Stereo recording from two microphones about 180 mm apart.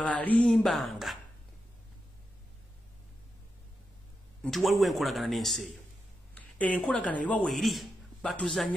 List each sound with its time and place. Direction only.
0.0 s speech: 10° left (ahead or behind)
4.4 s speech: centre (ahead or behind)